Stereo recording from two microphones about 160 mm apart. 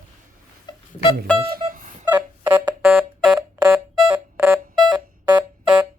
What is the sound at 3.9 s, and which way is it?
Music, 5° right (ahead or behind).